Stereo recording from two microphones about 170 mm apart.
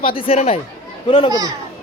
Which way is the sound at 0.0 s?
30° left (ahead or behind).